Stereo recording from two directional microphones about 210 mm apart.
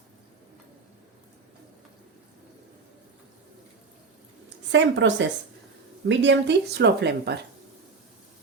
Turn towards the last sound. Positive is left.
turn(degrees=-55)  # may be behind; listen again after turning